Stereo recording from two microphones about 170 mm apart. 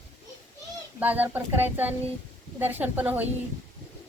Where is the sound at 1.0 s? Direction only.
10° right (ahead or behind).